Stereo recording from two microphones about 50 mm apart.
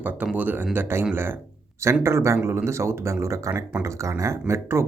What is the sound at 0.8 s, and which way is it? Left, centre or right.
Speech, right.